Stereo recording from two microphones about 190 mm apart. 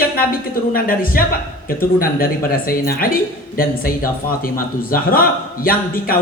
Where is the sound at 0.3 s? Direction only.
50° left (ahead or behind).